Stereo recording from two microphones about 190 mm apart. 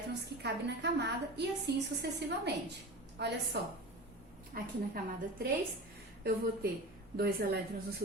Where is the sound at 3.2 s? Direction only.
60° right (ahead or behind).